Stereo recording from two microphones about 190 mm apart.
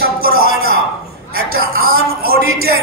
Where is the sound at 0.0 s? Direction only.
50° right (ahead or behind).